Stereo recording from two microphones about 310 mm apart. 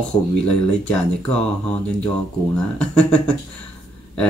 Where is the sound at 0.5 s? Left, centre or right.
Centre.